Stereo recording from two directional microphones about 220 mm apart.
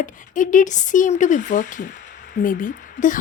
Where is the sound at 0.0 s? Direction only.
35° left (ahead or behind).